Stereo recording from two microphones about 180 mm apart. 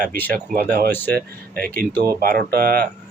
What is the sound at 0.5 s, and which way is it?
Speech, 55° right (ahead or behind).